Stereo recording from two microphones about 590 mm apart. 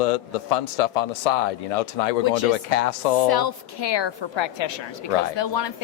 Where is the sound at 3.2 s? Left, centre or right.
Left.